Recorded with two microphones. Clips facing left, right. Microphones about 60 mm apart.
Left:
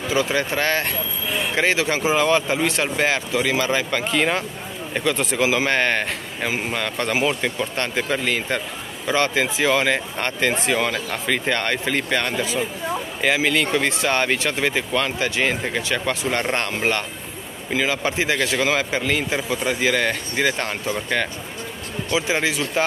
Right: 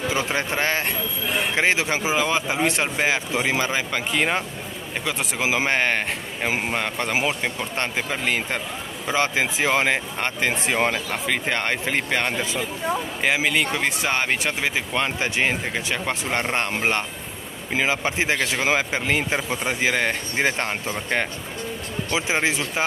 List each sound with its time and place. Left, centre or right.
0.1 s speech: right
2.6 s speech: right; by 5.4 s centre
5.4 s speech: centre
6.5 s speech: right
10.6 s speech: right
10.9 s speech: centre
15.0 s speech: right
15.6 s speech: centre